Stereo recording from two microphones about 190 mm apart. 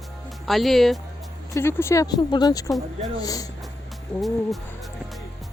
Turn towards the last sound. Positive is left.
turn(degrees=0)  # may be behind; listen again after turning